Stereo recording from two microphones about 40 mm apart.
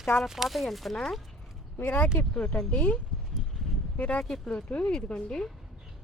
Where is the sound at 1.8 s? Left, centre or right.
Left.